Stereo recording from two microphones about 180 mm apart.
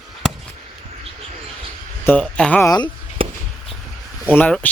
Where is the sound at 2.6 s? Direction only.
20° left (ahead or behind).